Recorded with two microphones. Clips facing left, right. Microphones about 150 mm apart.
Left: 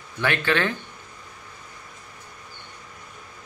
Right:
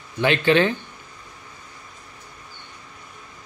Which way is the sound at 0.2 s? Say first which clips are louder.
Right 6 dB; 20° right (ahead or behind).